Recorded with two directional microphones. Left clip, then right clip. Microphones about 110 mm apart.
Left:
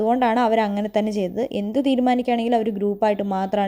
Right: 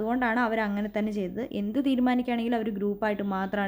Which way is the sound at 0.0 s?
35° left (ahead or behind).